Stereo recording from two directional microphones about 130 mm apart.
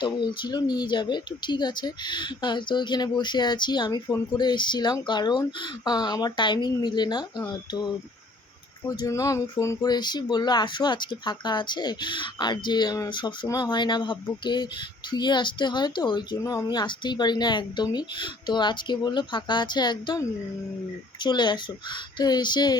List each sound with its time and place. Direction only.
0.0 s speech: 35° left (ahead or behind)
8.9 s speech: 25° left (ahead or behind)
21.2 s speech: 35° left (ahead or behind)